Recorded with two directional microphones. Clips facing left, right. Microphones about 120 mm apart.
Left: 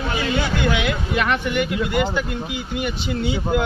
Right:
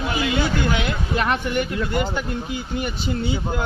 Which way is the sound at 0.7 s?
40° right (ahead or behind).